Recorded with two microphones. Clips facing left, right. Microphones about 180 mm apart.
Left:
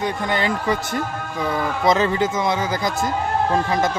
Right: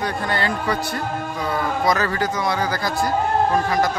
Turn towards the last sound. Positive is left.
turn(degrees=25)  # may be behind; listen again after turning